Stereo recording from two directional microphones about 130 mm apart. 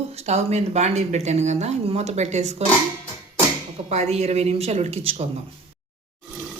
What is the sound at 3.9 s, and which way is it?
Speech, 55° right (ahead or behind).